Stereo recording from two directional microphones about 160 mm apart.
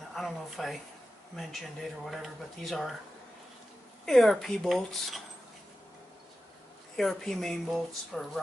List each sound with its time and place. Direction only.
0.1 s speech: centre (ahead or behind)
4.0 s speech: centre (ahead or behind)
7.0 s speech: centre (ahead or behind)